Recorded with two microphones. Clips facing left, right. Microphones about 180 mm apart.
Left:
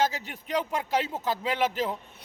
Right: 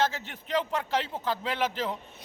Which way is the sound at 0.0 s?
10° left (ahead or behind).